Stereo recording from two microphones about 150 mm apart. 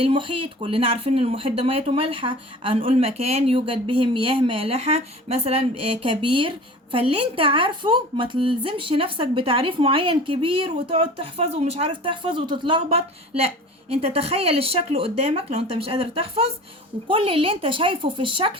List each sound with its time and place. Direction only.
0.0 s a woman's voice: 35° right (ahead or behind)